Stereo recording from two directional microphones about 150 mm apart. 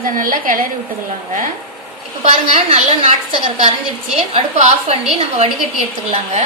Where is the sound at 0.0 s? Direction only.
65° right (ahead or behind).